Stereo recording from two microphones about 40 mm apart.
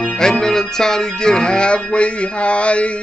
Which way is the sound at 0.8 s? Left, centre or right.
Centre.